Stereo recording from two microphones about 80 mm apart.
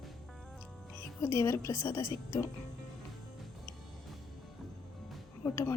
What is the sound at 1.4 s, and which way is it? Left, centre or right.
Speech, left.